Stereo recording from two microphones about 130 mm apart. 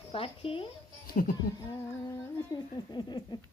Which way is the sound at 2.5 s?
25° left (ahead or behind).